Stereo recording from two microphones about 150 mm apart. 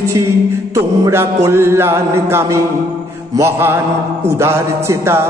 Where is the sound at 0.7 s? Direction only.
20° right (ahead or behind).